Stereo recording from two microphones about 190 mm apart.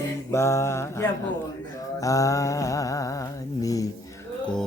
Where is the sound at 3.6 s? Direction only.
15° left (ahead or behind).